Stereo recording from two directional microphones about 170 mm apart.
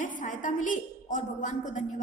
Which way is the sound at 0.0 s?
50° left (ahead or behind).